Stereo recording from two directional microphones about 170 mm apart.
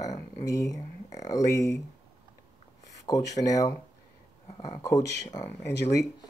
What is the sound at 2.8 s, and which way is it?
Speech, 20° left (ahead or behind).